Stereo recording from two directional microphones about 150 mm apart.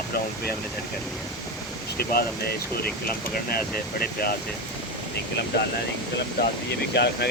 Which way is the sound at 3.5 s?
85° left.